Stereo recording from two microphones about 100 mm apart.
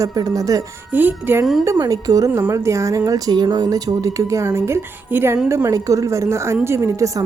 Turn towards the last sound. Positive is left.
turn(degrees=-30)  # may be behind; listen again after turning